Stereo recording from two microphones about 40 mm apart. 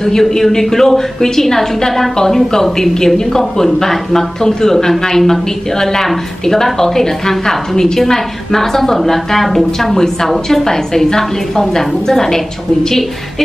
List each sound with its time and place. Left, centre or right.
0.0 s a woman's voice: centre